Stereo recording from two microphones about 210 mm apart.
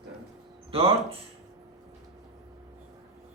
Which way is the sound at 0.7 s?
25° right (ahead or behind).